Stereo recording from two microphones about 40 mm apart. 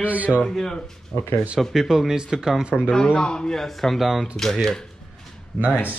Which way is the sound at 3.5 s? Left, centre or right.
Centre.